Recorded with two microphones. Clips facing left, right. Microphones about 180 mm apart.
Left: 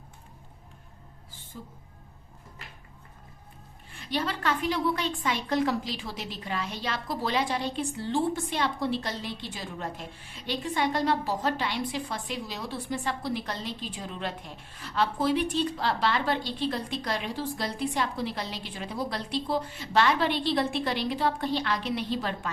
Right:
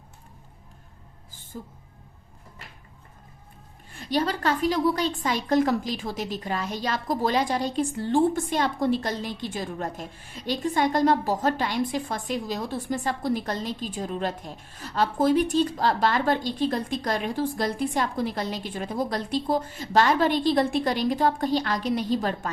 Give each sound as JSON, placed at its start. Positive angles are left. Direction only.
{"t": 1.5, "sound": "a woman's voice", "side_deg": -45}
{"t": 3.9, "sound": "a woman's voice", "side_deg": -40}